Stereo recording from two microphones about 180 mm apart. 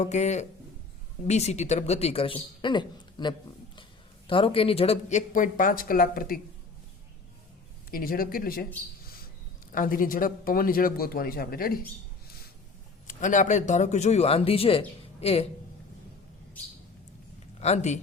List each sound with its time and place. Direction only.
0.0 s speech: 40° left (ahead or behind)
7.9 s speech: 55° left (ahead or behind)
9.7 s speech: 50° left (ahead or behind)
13.1 s speech: 45° left (ahead or behind)
17.6 s speech: 35° left (ahead or behind)